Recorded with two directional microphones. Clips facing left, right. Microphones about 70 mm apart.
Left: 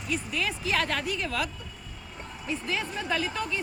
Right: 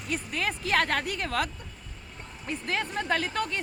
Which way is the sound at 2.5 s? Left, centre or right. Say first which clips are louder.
Right 1 dB; right.